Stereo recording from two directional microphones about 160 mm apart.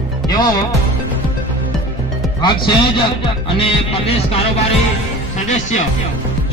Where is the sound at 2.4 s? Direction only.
30° left (ahead or behind).